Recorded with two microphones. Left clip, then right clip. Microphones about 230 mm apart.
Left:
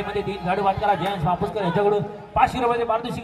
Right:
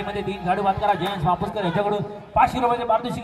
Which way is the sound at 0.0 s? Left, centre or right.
Centre.